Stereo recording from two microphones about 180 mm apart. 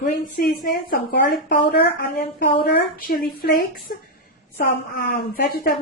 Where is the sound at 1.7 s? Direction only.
65° left (ahead or behind).